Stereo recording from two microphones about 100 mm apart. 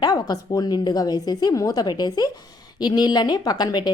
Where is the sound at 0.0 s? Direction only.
40° left (ahead or behind).